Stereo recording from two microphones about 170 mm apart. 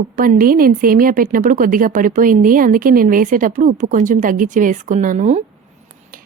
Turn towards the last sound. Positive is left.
turn(degrees=-55)  # may be behind; listen again after turning